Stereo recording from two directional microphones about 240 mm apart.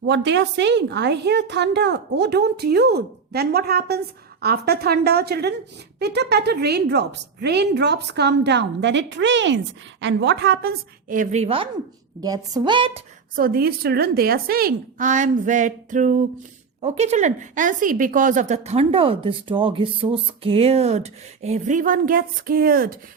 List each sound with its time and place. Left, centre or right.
0.0 s a woman's voice: right
13.3 s speech: right